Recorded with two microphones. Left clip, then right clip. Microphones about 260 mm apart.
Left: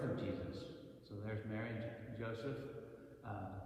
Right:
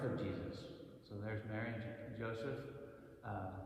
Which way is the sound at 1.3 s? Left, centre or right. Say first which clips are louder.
Right 1 dB; right.